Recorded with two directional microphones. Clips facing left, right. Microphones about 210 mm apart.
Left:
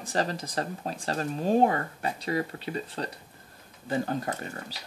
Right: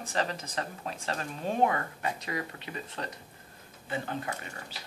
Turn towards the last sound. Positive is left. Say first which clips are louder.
# left 5 dB
turn(degrees=40)  # may be behind; listen again after turning